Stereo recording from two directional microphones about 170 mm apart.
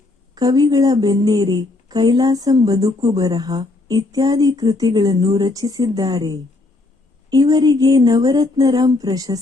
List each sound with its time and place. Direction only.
0.3 s a woman's voice: 25° right (ahead or behind)